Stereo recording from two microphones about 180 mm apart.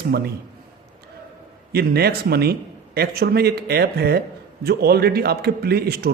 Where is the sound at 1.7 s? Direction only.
60° right (ahead or behind).